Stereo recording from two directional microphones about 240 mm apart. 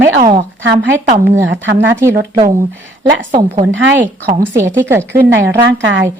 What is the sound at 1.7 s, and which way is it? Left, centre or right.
Speech, right.